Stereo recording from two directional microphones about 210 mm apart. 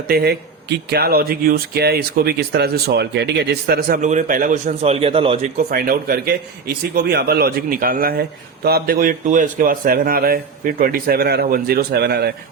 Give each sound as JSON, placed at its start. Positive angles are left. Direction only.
{"t": 0.1, "sound": "speech", "side_deg": -50}
{"t": 5.5, "sound": "speech", "side_deg": -45}